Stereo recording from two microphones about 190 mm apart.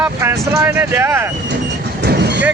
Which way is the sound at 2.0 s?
55° right (ahead or behind).